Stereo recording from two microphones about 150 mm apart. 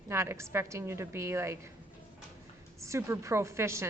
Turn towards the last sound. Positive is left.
turn(degrees=-20)  # may be behind; listen again after turning